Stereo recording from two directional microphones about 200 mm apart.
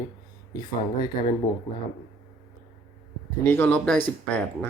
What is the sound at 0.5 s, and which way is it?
Speech, 20° left (ahead or behind).